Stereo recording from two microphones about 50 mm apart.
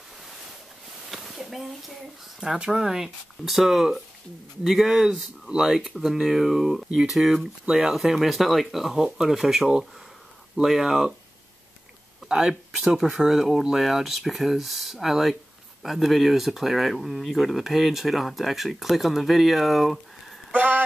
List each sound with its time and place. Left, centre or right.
1.1 s a sound: centre
2.4 s speech: centre
7.6 s speech: centre
7.9 s speech: centre
12.3 s speech: centre
20.5 s a sound: right